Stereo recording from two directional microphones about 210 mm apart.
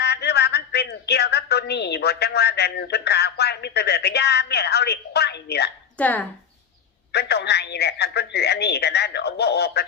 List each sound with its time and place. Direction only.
0.0 s a woman's voice: 50° left (ahead or behind)
6.0 s speech: 10° left (ahead or behind)
7.1 s speech: 50° left (ahead or behind)